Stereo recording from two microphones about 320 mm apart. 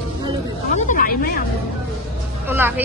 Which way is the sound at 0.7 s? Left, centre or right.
Left.